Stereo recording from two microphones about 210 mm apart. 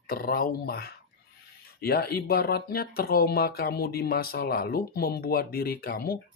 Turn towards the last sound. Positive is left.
turn(degrees=45)  # may be behind; listen again after turning